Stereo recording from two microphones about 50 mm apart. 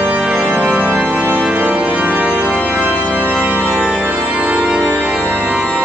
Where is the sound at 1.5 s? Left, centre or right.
Right.